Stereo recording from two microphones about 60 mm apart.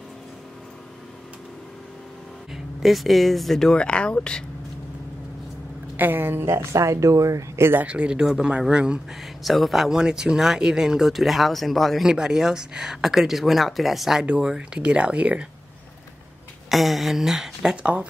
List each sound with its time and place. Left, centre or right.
2.5 s speech: centre
5.9 s speech: right
7.8 s speech: centre
9.4 s speech: centre
12.1 s speech: centre
14.2 s speech: centre
16.6 s speech: centre